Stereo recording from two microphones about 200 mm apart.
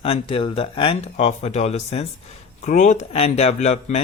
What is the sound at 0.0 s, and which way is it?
Speech, 30° left (ahead or behind).